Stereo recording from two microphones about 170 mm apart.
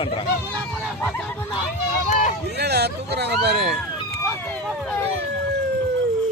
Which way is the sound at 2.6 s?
70° right (ahead or behind).